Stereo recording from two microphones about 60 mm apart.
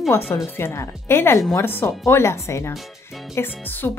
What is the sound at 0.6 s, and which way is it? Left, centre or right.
Speech, left.